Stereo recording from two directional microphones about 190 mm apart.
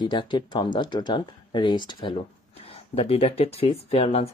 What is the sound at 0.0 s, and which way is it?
Speech, 25° left (ahead or behind).